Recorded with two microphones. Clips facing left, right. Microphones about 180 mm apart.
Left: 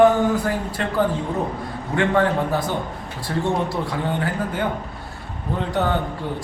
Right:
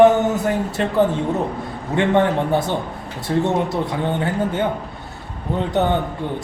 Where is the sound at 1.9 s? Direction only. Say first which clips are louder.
Right 2 dB; 25° right (ahead or behind).